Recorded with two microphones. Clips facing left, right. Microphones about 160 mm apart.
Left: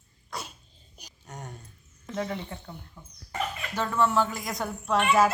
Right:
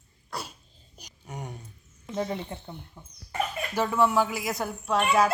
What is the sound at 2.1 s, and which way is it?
Speech, 20° right (ahead or behind).